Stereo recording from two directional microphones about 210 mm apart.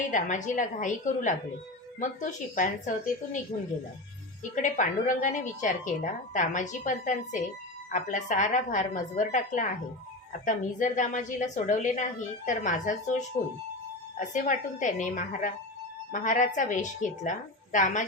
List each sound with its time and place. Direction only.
0.1 s a woman's voice: 35° left (ahead or behind)
4.5 s a woman's voice: 35° left (ahead or behind)